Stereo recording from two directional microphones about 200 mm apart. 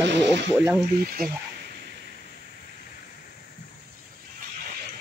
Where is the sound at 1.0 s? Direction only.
50° right (ahead or behind).